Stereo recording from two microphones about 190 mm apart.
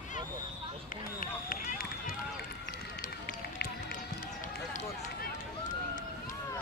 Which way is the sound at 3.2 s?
55° left (ahead or behind).